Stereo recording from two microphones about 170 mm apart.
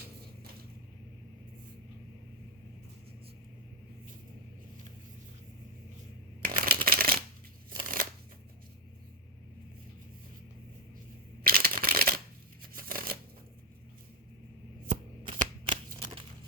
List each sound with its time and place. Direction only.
6.4 s shuffling cards: 60° right (ahead or behind)
11.4 s shuffling cards: 60° right (ahead or behind)
14.8 s shuffling cards: 50° right (ahead or behind)